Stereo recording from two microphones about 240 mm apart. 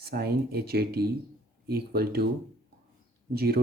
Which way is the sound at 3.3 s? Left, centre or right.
Right.